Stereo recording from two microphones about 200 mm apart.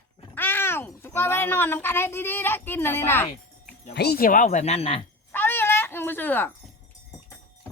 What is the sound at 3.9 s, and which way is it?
Speech, 55° left (ahead or behind).